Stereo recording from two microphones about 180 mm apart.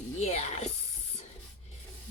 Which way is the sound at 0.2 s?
35° left (ahead or behind).